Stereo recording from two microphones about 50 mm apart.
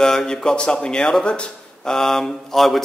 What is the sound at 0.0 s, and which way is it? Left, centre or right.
A man's voice, centre.